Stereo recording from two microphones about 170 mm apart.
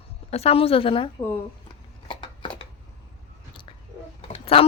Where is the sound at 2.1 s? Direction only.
30° left (ahead or behind).